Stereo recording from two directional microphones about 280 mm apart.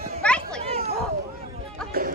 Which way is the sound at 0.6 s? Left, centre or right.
Right.